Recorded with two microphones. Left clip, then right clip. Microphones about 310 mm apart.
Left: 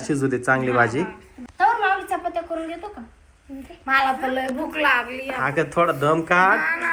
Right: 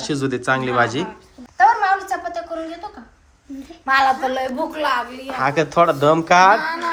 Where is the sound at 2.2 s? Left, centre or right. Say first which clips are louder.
Even; centre.